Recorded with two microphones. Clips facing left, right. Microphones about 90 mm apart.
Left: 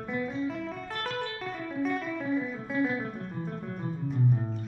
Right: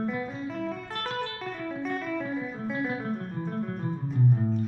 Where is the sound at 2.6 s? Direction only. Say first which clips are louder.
Even; centre (ahead or behind).